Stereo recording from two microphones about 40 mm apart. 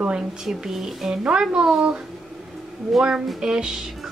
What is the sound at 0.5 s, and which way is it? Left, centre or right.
Speech, centre.